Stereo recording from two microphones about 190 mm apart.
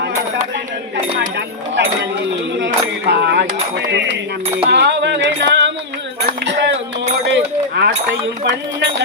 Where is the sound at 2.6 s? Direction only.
60° right (ahead or behind).